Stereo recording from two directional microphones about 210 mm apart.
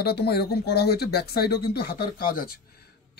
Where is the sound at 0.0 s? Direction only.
50° left (ahead or behind).